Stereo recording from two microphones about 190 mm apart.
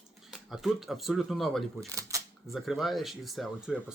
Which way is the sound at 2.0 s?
15° right (ahead or behind).